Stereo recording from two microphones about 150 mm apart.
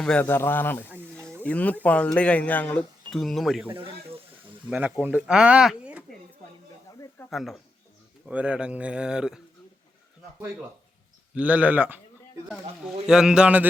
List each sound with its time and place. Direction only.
0.0 s a man's voice: 10° left (ahead or behind)
1.1 s a sound: 5° left (ahead or behind)
1.5 s a man's voice: 10° left (ahead or behind)
3.7 s speech: 35° right (ahead or behind)
4.7 s speech: 10° right (ahead or behind)
7.3 s speech: centre (ahead or behind)
11.3 s speech: 10° right (ahead or behind)
13.1 s speech: 5° right (ahead or behind)